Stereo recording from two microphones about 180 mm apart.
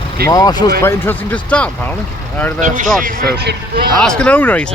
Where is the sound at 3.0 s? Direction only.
65° right (ahead or behind).